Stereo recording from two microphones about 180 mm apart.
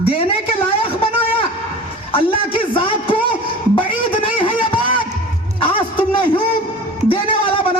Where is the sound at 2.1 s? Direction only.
30° left (ahead or behind).